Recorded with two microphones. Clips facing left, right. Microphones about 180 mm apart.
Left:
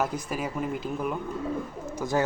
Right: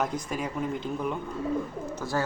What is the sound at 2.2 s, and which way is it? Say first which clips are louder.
Speech: left 3 dB; 15° left (ahead or behind).